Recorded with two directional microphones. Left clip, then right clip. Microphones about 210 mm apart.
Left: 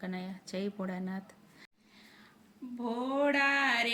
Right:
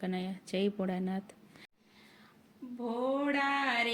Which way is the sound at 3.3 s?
50° left (ahead or behind).